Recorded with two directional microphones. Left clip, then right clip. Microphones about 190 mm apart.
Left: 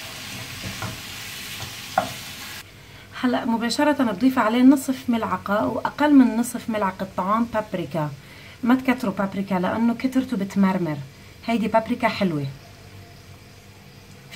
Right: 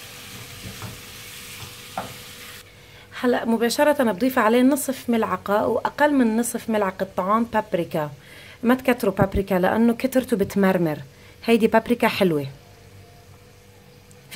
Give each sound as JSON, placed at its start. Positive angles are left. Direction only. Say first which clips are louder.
{"t": 3.1, "sound": "a woman's voice", "louder": "right 2 dB", "side_deg": -45}